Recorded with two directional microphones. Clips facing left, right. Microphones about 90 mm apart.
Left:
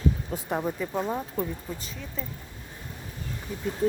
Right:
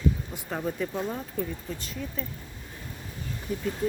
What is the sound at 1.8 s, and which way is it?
Speech, centre (ahead or behind).